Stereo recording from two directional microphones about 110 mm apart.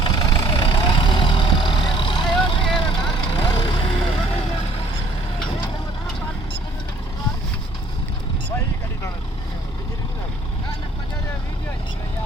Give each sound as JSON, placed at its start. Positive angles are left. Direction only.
{"t": 0.0, "sound": "vehicle", "side_deg": 40}